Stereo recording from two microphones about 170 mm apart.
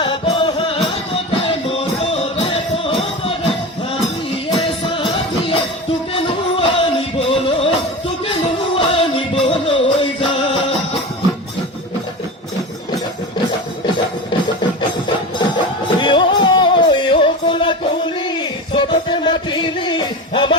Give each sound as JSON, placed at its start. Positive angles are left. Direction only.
{"t": 0.0, "sound": "music", "side_deg": 30}
{"t": 4.9, "sound": "music", "side_deg": 30}
{"t": 16.0, "sound": "music", "side_deg": 25}